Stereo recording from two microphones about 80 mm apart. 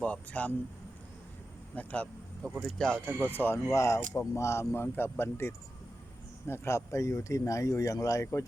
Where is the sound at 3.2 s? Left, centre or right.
Left.